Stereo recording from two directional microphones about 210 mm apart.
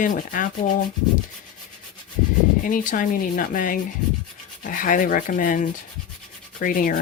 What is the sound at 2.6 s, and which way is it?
Speech, 40° left (ahead or behind).